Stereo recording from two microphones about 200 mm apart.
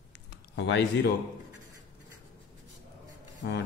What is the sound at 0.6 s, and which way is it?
Speech, 60° left (ahead or behind).